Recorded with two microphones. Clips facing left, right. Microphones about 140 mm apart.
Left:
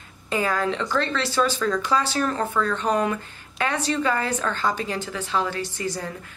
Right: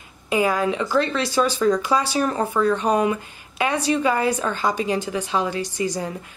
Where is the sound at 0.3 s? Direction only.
10° right (ahead or behind).